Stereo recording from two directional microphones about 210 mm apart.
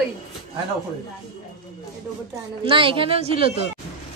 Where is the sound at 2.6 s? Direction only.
25° right (ahead or behind).